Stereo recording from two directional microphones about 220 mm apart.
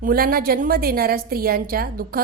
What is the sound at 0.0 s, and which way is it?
A woman's voice, 40° right (ahead or behind).